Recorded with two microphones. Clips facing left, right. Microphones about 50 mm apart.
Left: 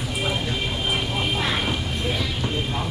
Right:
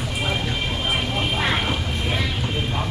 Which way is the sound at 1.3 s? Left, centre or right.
Centre.